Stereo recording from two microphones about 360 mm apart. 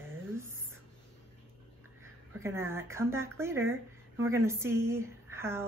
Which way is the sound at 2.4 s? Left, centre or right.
Centre.